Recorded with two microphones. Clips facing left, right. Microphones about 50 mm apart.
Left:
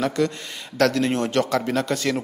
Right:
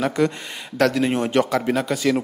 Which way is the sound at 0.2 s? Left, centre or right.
Centre.